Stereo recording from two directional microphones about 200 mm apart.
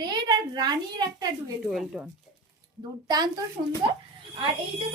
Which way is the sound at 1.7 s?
Centre (ahead or behind).